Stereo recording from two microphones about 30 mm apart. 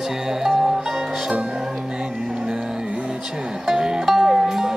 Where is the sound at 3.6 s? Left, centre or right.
Centre.